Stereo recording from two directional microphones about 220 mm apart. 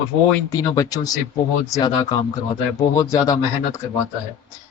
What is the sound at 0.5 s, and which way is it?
Speech, 15° left (ahead or behind).